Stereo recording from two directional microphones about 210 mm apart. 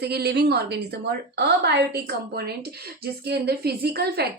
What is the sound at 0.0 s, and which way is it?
A woman's voice, 50° right (ahead or behind).